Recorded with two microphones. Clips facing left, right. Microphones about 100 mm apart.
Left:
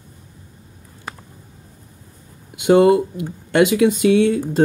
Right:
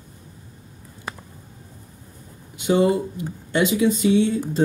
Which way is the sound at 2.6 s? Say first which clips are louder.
Left 6 dB; 90° left.